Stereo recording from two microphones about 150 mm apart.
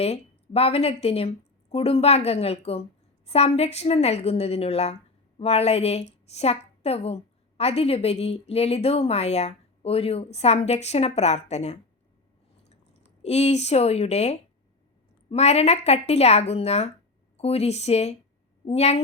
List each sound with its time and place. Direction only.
0.0 s a woman's voice: 45° left (ahead or behind)